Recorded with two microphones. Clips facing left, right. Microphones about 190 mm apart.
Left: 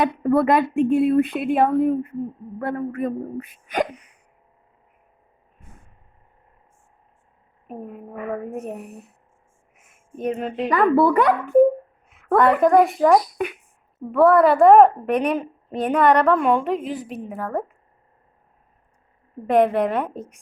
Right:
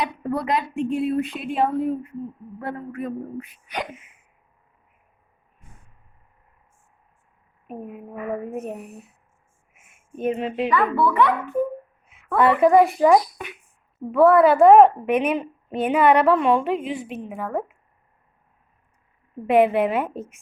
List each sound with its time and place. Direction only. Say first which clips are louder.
0.0 s speech: left 7 dB; 50° left (ahead or behind)
7.7 s a woman's voice: even; 5° right (ahead or behind)
9.7 s a sound: even; 5° right (ahead or behind)
10.7 s speech: left 6 dB; 40° left (ahead or behind)
12.0 s a sound: left 2 dB; centre (ahead or behind)
12.4 s a woman's voice: even; 5° right (ahead or behind)
19.5 s a woman's voice: even; 5° right (ahead or behind)